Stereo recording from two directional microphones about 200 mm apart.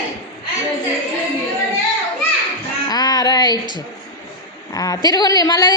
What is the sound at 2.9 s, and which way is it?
Female singing, 20° left (ahead or behind).